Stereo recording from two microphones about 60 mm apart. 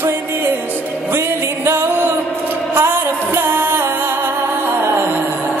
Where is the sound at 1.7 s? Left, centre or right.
Right.